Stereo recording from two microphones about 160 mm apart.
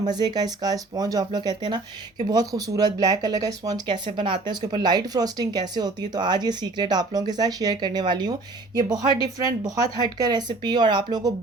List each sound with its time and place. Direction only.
0.1 s speech: 25° right (ahead or behind)